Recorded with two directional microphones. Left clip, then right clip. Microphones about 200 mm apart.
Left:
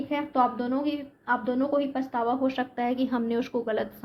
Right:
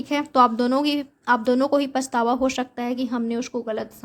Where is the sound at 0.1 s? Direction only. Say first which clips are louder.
Right 7 dB; 50° right (ahead or behind).